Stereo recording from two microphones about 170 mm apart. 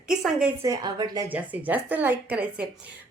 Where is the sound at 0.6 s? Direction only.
20° right (ahead or behind).